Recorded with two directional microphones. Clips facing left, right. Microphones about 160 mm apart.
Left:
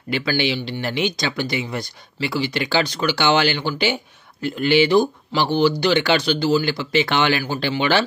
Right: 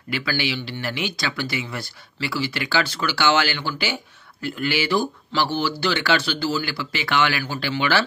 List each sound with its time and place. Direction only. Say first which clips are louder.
0.1 s speech: left 4 dB; 20° left (ahead or behind)